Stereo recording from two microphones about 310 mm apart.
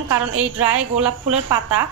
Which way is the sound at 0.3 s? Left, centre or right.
Right.